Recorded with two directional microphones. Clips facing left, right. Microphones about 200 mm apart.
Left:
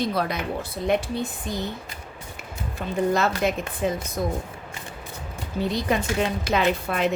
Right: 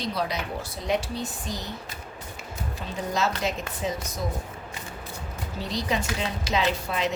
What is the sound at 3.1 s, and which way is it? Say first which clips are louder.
A woman's voice: left 4 dB; 55° left (ahead or behind).